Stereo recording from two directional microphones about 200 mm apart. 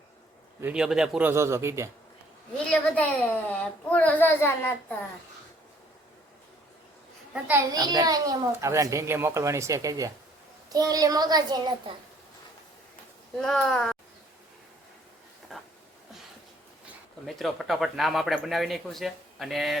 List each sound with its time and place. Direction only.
0.6 s a child's voice: 5° right (ahead or behind)
2.6 s a woman's voice: 5° left (ahead or behind)
7.7 s a child's voice: 20° right (ahead or behind)
13.4 s speech: centre (ahead or behind)
15.5 s a sound: centre (ahead or behind)
17.2 s speech: centre (ahead or behind)